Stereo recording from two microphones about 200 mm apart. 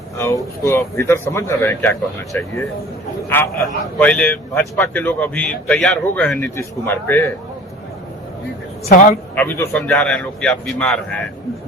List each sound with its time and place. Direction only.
0.2 s a man's voice: 15° left (ahead or behind)
3.9 s a man's voice: 5° left (ahead or behind)
8.9 s speech: 40° left (ahead or behind)
9.3 s a man's voice: 10° left (ahead or behind)